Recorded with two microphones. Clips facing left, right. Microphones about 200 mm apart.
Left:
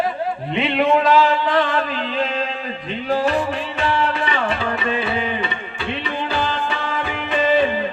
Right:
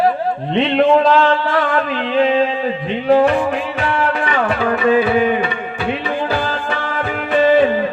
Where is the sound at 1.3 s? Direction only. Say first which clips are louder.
Right 3 dB; 15° left (ahead or behind).